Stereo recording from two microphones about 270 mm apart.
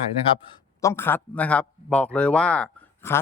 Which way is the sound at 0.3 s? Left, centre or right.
Centre.